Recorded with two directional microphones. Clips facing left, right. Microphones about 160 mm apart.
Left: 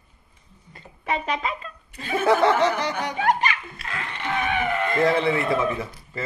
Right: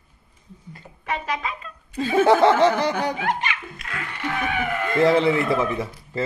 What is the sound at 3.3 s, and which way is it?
Laughter, 40° left (ahead or behind).